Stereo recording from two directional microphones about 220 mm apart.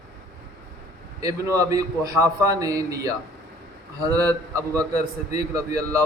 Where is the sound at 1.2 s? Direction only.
15° right (ahead or behind).